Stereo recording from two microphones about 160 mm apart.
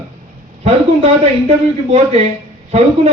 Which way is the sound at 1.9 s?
40° right (ahead or behind).